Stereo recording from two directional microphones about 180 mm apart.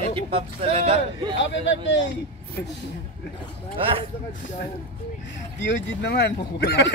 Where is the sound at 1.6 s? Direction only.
85° left.